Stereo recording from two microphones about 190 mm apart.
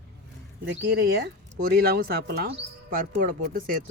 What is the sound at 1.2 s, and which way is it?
Speech, 55° right (ahead or behind).